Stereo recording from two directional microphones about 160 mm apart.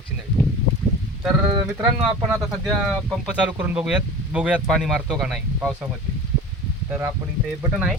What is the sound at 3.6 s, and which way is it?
Speech, 10° right (ahead or behind).